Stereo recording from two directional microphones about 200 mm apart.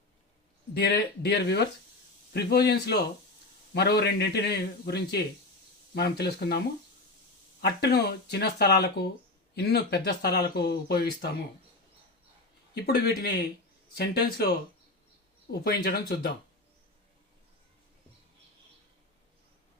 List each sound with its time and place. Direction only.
0.7 s speech: 55° left (ahead or behind)
7.6 s speech: 55° left (ahead or behind)
12.7 s speech: 50° left (ahead or behind)
15.6 s speech: 50° left (ahead or behind)